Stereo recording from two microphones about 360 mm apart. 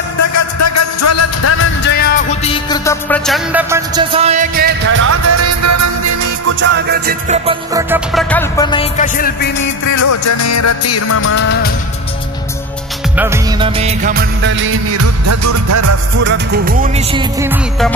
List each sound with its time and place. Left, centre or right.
0.6 s music: left; by 6.5 s right
6.6 s music: right; by 9.7 s left
9.8 s music: left
13.1 s music of bollywood: centre; by 16.0 s right
16.3 s music: right; by 17.9 s centre